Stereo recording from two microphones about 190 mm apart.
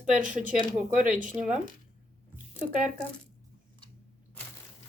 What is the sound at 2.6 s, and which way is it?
Speech, 40° right (ahead or behind).